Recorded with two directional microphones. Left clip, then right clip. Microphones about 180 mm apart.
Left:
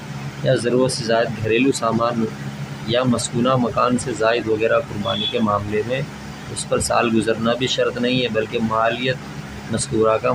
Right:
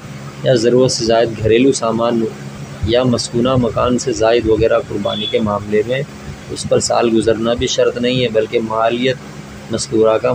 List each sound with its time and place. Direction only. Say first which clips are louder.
0.4 s speech: right 6 dB; 20° right (ahead or behind)